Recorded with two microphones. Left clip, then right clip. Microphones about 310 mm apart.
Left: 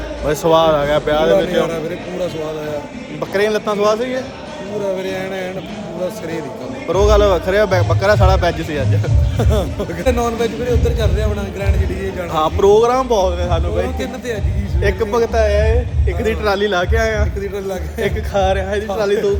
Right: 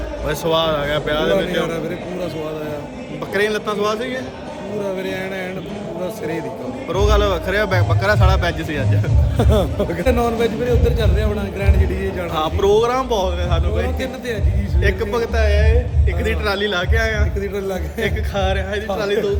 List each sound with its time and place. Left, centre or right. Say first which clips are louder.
0.3 s speech: left 6 dB; centre
3.3 s a man's voice: left 3 dB; centre
6.8 s speech: left 5 dB; centre
9.4 s speech: right 2 dB; centre
10.0 s a man's voice: left 1 dB; centre
17.4 s a man's voice: left 1 dB; centre
18.0 s speech: left 5 dB; centre